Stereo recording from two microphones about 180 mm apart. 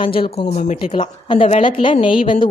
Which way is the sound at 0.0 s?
30° left (ahead or behind).